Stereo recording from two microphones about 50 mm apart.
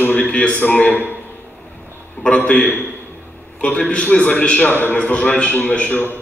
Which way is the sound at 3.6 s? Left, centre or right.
Left.